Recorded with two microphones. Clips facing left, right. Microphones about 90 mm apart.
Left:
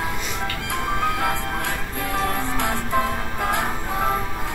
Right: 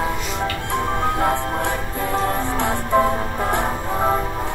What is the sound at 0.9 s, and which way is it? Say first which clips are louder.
Music: right 3 dB; 30° right (ahead or behind).